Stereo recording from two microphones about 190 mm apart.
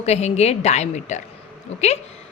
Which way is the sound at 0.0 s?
35° left (ahead or behind).